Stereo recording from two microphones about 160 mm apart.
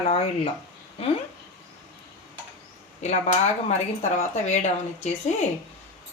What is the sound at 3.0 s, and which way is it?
Speech, 45° left (ahead or behind).